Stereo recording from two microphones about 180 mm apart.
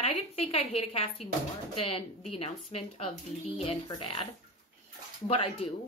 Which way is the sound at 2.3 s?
30° left (ahead or behind).